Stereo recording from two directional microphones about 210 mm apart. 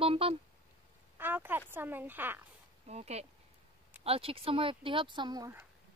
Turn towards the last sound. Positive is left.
turn(degrees=-15)  # may be behind; listen again after turning